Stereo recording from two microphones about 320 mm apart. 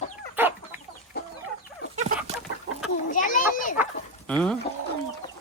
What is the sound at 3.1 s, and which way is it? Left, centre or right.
Children playing, left.